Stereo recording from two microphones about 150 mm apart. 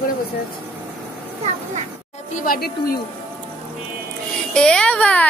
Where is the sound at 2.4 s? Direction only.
75° left (ahead or behind).